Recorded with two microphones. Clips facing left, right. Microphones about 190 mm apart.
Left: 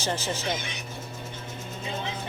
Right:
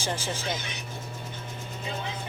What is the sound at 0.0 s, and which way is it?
Speech, 10° right (ahead or behind).